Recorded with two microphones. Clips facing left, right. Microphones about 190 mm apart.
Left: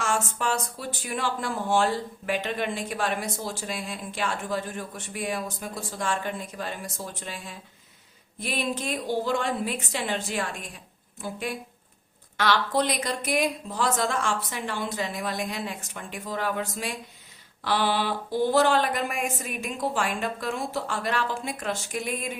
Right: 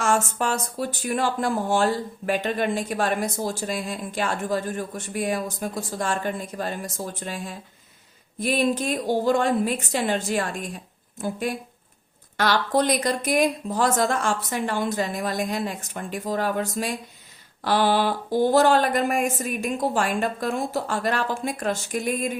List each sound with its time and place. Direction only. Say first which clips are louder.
0.0 s speech: right 4 dB; 45° right (ahead or behind)